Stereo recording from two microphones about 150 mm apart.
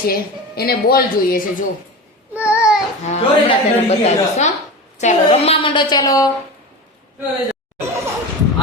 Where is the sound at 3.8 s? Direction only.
45° left (ahead or behind); by 6.3 s 25° left (ahead or behind).